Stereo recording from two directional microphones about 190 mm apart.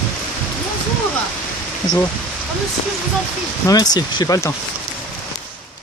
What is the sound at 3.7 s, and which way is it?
Speech, 20° left (ahead or behind).